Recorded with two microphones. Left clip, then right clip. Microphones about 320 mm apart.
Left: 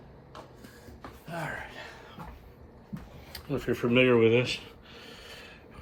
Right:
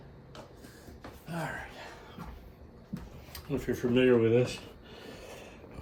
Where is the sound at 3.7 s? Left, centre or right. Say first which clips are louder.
Left 2 dB; centre.